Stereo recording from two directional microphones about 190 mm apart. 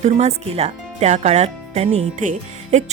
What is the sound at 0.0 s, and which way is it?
Speech, 35° right (ahead or behind).